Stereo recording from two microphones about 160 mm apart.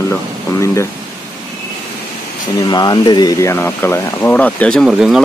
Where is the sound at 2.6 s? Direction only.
25° left (ahead or behind).